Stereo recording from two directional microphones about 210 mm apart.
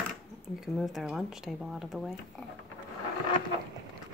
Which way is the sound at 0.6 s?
Centre (ahead or behind).